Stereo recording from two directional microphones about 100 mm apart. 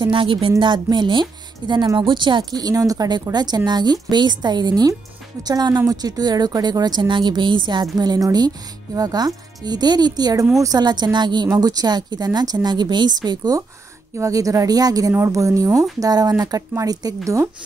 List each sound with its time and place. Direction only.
0.0 s speech: 60° right (ahead or behind)
0.6 s a woman's voice: 50° right (ahead or behind)